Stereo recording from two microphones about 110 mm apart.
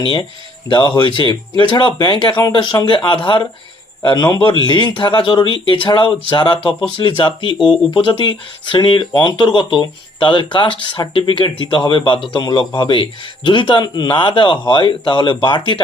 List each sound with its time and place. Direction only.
0.0 s speech: 45° left (ahead or behind)
4.0 s a man's voice: 40° left (ahead or behind)
4.4 s speech: 50° left (ahead or behind)